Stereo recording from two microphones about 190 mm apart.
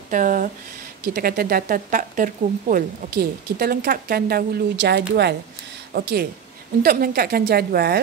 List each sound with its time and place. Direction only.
0.1 s speech: 45° right (ahead or behind)